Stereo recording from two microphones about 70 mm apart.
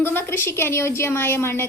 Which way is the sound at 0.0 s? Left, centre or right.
Left.